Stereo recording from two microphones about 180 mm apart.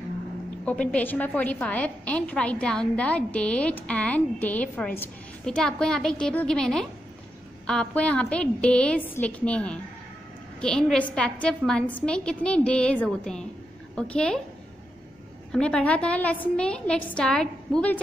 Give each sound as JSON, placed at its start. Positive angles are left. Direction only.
{"t": 0.7, "sound": "a woman's voice", "side_deg": 5}
{"t": 15.5, "sound": "a woman's voice", "side_deg": 5}